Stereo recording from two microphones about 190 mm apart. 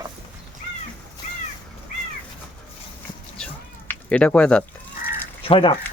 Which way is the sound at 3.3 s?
5° left (ahead or behind).